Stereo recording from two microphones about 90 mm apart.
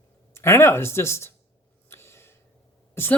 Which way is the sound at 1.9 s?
30° left (ahead or behind).